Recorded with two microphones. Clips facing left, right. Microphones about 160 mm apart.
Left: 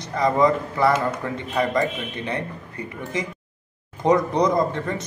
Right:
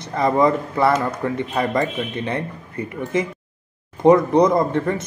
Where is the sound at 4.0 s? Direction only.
20° right (ahead or behind).